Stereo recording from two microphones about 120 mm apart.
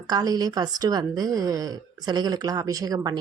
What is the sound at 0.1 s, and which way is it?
A woman's voice, 30° right (ahead or behind).